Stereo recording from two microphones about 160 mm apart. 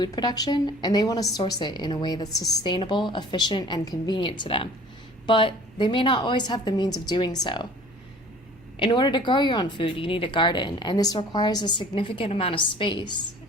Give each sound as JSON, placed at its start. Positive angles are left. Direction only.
{"t": 0.0, "sound": "a woman's voice", "side_deg": 25}
{"t": 8.8, "sound": "a woman's voice", "side_deg": 30}